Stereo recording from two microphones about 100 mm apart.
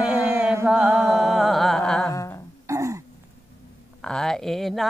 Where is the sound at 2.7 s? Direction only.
30° right (ahead or behind).